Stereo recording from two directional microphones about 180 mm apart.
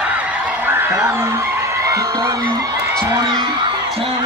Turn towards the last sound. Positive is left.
turn(degrees=-25)  # may be behind; listen again after turning